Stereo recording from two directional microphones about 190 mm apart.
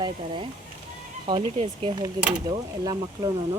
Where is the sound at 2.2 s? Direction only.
5° right (ahead or behind).